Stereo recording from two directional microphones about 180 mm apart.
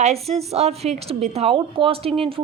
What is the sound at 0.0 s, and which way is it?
Speech, 35° right (ahead or behind).